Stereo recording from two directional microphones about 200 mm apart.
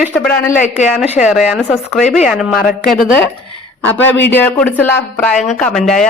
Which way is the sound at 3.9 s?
10° left (ahead or behind).